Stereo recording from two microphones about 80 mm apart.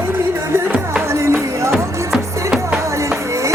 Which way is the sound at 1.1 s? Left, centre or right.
Right.